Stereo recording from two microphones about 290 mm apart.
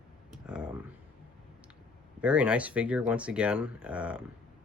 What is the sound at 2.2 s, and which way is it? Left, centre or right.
Speech, centre.